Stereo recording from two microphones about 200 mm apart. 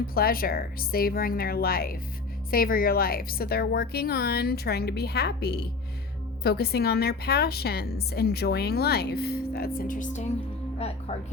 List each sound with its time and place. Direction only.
0.1 s a woman's voice: 50° left (ahead or behind)